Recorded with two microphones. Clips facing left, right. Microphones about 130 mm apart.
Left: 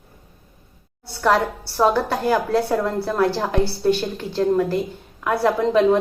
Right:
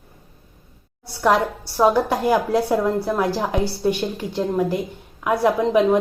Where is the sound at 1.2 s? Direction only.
10° right (ahead or behind).